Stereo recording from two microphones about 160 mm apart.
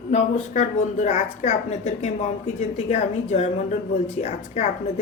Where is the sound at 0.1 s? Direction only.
50° left (ahead or behind).